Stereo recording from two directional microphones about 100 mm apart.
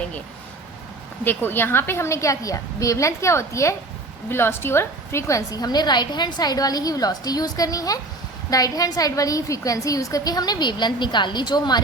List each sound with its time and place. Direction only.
1.2 s a woman's voice: 20° left (ahead or behind); by 11.8 s 45° left (ahead or behind)